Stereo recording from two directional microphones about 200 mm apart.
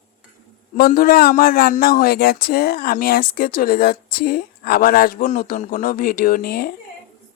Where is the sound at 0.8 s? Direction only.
45° left (ahead or behind).